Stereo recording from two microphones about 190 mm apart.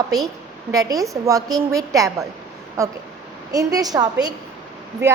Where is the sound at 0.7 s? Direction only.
20° right (ahead or behind).